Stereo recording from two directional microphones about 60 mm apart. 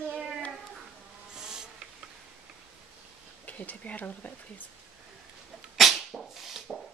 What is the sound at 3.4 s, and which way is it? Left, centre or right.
Speech, left.